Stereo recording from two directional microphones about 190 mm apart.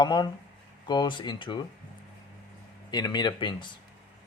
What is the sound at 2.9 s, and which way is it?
Speech, 20° left (ahead or behind).